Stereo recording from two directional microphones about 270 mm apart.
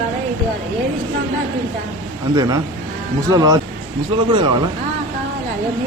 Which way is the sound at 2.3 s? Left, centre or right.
Centre.